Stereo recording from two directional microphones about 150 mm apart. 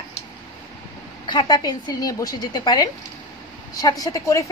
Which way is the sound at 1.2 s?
30° left (ahead or behind).